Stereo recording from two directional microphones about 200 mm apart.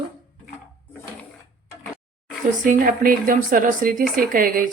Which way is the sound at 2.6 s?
40° right (ahead or behind).